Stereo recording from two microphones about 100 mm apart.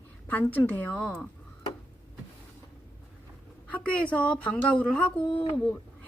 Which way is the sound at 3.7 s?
10° left (ahead or behind).